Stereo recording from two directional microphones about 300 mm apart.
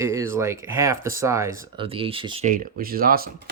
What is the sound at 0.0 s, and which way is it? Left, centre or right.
Speech, centre.